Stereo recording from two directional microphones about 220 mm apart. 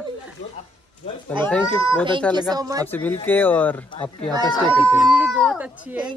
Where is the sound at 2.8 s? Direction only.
10° left (ahead or behind).